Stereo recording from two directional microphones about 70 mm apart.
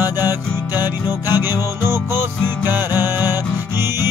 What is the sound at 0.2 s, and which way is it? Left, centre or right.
Music, right.